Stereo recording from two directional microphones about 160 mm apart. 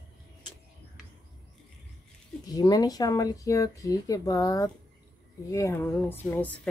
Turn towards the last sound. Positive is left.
turn(degrees=10)  # may be behind; listen again after turning